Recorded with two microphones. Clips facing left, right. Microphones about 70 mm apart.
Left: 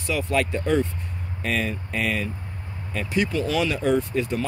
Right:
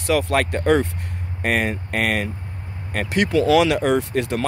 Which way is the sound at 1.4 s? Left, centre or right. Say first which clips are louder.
Right 5 dB; right.